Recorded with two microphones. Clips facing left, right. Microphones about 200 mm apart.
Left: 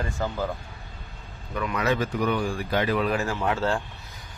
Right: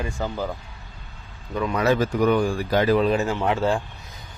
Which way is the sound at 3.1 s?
20° right (ahead or behind).